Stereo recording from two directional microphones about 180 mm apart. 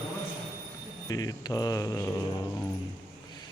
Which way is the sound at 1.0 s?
20° left (ahead or behind).